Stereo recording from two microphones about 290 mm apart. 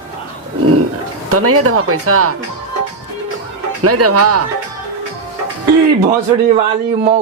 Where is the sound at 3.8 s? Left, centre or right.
Right.